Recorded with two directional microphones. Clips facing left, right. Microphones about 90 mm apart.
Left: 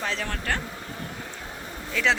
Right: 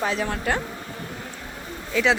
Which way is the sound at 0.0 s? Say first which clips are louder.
Right 5 dB; 15° right (ahead or behind).